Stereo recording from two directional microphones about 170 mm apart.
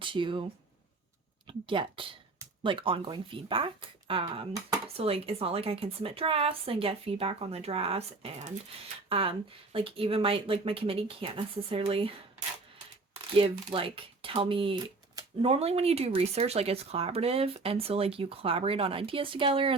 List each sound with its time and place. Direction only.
0.0 s speech: 30° right (ahead or behind)
13.3 s speech: 30° right (ahead or behind)